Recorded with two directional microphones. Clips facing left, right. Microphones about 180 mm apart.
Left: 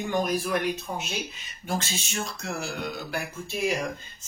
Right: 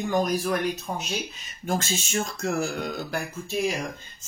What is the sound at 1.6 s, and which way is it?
Speech, 45° right (ahead or behind).